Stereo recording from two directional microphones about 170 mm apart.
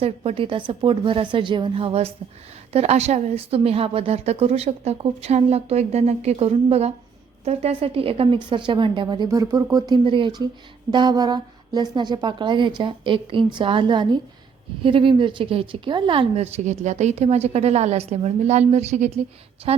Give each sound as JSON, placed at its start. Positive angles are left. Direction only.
{"t": 0.0, "sound": "a woman's voice", "side_deg": -35}